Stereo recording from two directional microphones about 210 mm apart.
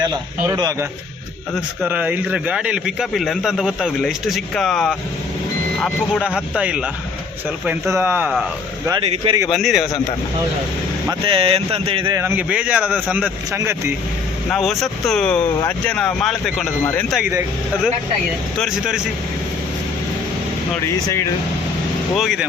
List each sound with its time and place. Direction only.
0.4 s speech: 15° right (ahead or behind); by 4.9 s centre (ahead or behind)
6.2 s speech: 5° right (ahead or behind)
8.9 s speech: 20° right (ahead or behind)
9.5 s speech: centre (ahead or behind)
11.1 s speech: 25° right (ahead or behind)
12.2 s speech: 5° right (ahead or behind)
14.5 s speech: centre (ahead or behind)
18.5 s speech: centre (ahead or behind)
22.1 s speech: centre (ahead or behind)